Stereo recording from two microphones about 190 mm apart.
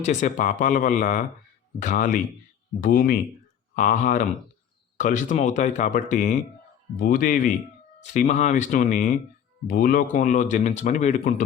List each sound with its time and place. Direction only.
0.0 s speech: 40° left (ahead or behind)